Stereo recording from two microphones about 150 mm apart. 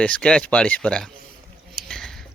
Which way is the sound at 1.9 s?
5° left (ahead or behind).